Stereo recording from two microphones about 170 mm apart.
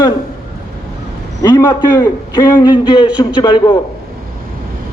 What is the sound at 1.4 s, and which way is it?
A man's voice, 20° left (ahead or behind).